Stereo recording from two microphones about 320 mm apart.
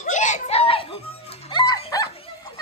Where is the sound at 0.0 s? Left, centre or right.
Left.